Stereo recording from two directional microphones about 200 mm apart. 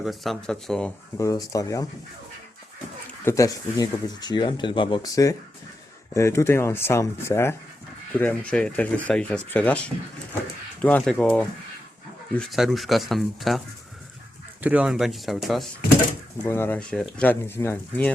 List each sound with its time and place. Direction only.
0.0 s speech: centre (ahead or behind); by 1.9 s 15° left (ahead or behind)
3.2 s speech: 15° left (ahead or behind); by 13.6 s centre (ahead or behind)
14.6 s speech: 5° right (ahead or behind)
16.5 s speech: 10° left (ahead or behind)